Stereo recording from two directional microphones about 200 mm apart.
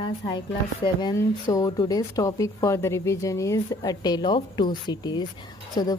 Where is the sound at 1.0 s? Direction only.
15° left (ahead or behind).